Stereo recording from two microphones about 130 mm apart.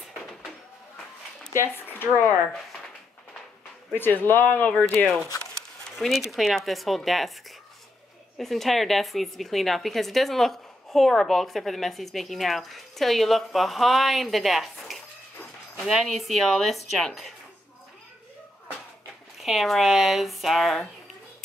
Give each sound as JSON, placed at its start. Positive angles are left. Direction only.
{"t": 1.7, "sound": "speech", "side_deg": 15}
{"t": 3.9, "sound": "speech", "side_deg": 15}
{"t": 5.9, "sound": "speech", "side_deg": 0}
{"t": 8.4, "sound": "speech", "side_deg": 0}
{"t": 19.3, "sound": "speech", "side_deg": 0}